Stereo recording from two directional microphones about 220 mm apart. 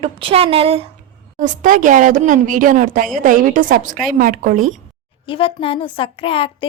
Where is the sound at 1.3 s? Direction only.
35° right (ahead or behind).